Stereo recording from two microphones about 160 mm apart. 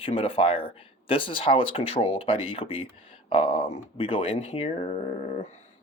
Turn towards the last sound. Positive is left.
turn(degrees=45)  # may be behind; listen again after turning